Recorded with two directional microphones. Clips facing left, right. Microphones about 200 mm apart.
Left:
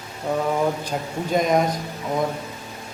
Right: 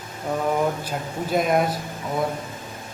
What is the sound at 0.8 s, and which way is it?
Speech, 5° right (ahead or behind).